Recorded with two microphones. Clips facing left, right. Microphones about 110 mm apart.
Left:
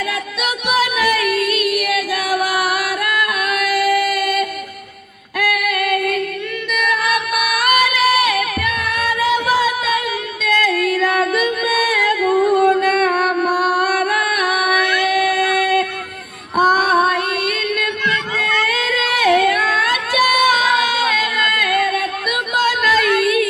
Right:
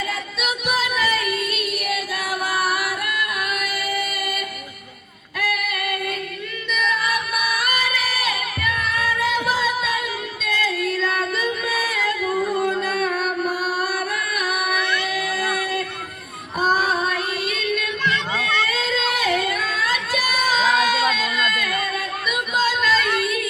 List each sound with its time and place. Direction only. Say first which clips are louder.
0.1 s music: left 4 dB; 70° left (ahead or behind)
5.4 s female singing: left 7 dB; 70° left (ahead or behind)
6.7 s music: left 4 dB; 65° left (ahead or behind)
10.4 s singing: left 7 dB; 65° left (ahead or behind)
15.0 s a sound: left 8 dB; 65° left (ahead or behind)
16.6 s female singing: left 6 dB; 70° left (ahead or behind)
18.0 s a sound: left 2 dB; 30° right (ahead or behind)
18.7 s singing: left 3 dB; 65° left (ahead or behind)